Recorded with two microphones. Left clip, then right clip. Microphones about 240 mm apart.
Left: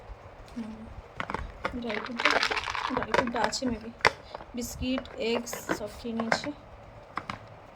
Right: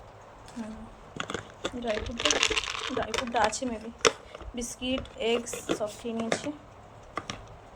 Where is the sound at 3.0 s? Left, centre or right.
Centre.